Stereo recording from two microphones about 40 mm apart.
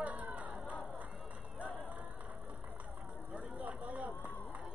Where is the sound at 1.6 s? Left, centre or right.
Right.